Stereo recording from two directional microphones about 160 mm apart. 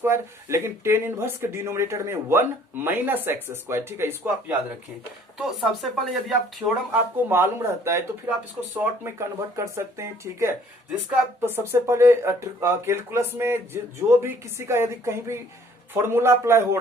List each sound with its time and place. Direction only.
0.0 s speech: 15° right (ahead or behind)
5.4 s speech: centre (ahead or behind)
7.3 s speech: 15° right (ahead or behind)